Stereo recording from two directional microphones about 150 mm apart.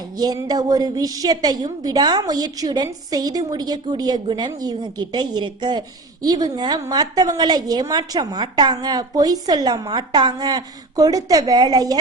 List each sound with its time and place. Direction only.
0.2 s a woman's voice: 25° right (ahead or behind)